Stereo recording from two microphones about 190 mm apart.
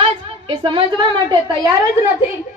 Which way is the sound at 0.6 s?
25° right (ahead or behind).